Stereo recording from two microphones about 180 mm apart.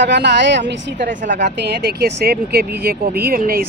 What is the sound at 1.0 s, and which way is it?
Speech, 45° right (ahead or behind).